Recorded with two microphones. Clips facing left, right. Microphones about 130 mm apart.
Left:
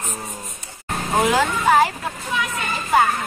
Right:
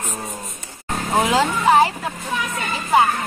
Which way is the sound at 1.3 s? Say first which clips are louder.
Right 3 dB; 20° right (ahead or behind).